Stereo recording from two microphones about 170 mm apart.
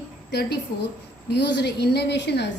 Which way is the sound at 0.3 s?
75° left (ahead or behind).